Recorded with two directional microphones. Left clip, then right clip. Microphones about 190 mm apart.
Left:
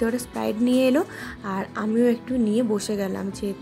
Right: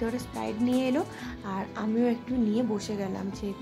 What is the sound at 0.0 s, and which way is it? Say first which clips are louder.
Music: left 7 dB; 20° left (ahead or behind).